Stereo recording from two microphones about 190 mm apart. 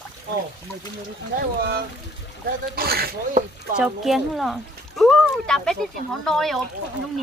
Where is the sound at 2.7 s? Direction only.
55° right (ahead or behind).